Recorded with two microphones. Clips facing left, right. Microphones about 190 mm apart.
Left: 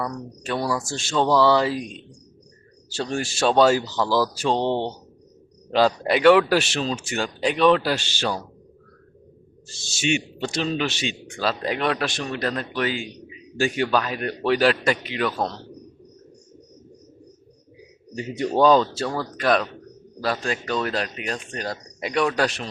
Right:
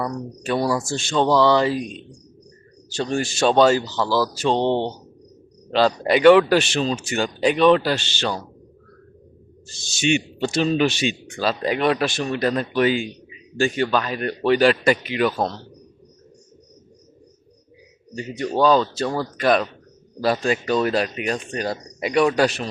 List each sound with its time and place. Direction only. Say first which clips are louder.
0.0 s speech: right 3 dB; 5° right (ahead or behind)
2.9 s speech: right 3 dB; 5° left (ahead or behind)
6.0 s speech: right 4 dB; centre (ahead or behind)
9.6 s speech: right 3 dB; 5° left (ahead or behind); by 11.1 s 15° right (ahead or behind)
11.3 s speech: right 2 dB; centre (ahead or behind); by 13.1 s 15° right (ahead or behind)
13.6 s speech: right 1 dB; 10° left (ahead or behind)
18.2 s speech: left 1 dB; 20° left (ahead or behind)
19.4 s speech: right 2 dB; centre (ahead or behind)